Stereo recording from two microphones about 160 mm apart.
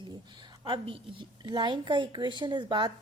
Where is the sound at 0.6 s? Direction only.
30° right (ahead or behind).